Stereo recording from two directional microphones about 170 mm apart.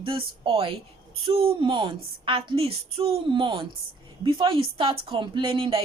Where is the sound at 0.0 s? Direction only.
30° right (ahead or behind).